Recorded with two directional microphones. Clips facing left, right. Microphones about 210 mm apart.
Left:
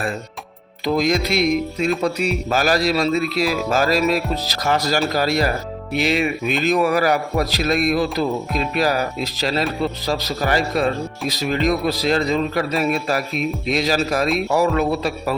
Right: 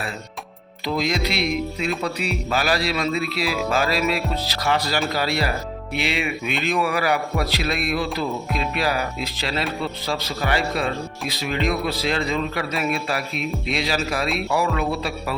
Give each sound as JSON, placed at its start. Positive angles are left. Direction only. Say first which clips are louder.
{"t": 0.9, "sound": "a man's voice", "louder": "left 5 dB", "side_deg": 45}